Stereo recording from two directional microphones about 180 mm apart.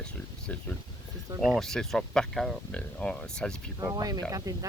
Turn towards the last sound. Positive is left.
turn(degrees=-20)  # may be behind; listen again after turning